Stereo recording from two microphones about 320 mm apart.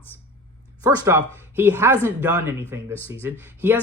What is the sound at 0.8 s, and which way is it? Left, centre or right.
A woman's voice, centre.